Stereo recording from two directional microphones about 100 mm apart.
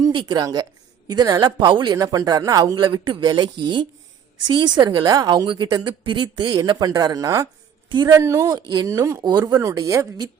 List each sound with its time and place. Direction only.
0.1 s a woman's voice: 45° right (ahead or behind)
2.8 s a woman's voice: 55° right (ahead or behind); by 7.4 s 35° right (ahead or behind)
7.9 s a woman's voice: 45° right (ahead or behind)
8.1 s speech: 30° right (ahead or behind)
8.5 s a woman's voice: 45° right (ahead or behind)
8.9 s speech: 25° right (ahead or behind)
9.2 s speech: 45° right (ahead or behind)